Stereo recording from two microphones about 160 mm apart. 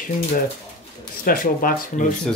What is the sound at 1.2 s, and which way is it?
Speech, 65° left (ahead or behind).